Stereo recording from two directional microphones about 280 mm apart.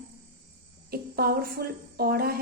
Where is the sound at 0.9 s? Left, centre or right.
Right.